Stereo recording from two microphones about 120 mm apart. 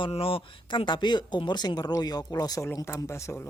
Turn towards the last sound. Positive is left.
turn(degrees=25)  # may be behind; listen again after turning